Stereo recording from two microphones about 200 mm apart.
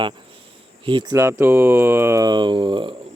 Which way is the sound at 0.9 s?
20° right (ahead or behind).